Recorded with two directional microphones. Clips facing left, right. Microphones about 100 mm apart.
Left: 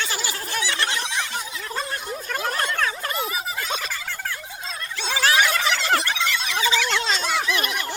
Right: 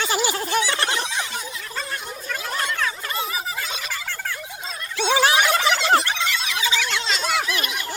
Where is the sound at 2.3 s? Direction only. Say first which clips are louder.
Left 1 dB; 45° left (ahead or behind).